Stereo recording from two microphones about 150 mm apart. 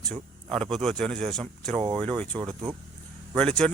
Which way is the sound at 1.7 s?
30° right (ahead or behind).